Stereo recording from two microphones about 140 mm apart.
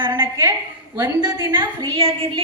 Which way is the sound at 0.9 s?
25° right (ahead or behind).